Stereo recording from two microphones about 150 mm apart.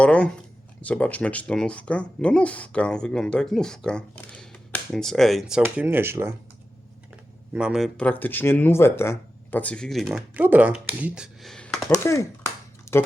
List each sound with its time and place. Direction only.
0.0 s speech: 10° left (ahead or behind); by 6.3 s 15° right (ahead or behind)
7.5 s speech: 5° right (ahead or behind)
12.0 s speech: 20° left (ahead or behind)
12.9 s a sound: 20° left (ahead or behind)